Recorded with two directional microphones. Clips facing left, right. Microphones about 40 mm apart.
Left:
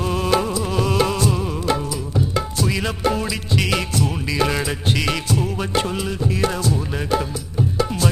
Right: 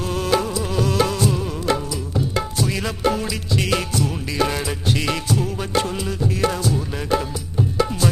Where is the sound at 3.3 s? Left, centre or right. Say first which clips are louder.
Left 1 dB; left.